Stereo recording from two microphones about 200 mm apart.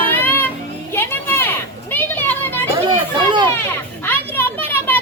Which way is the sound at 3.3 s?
25° right (ahead or behind).